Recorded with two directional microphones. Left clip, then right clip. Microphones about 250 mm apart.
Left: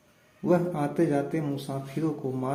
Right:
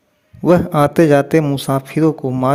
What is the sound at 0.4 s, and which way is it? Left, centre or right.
A man's voice, right.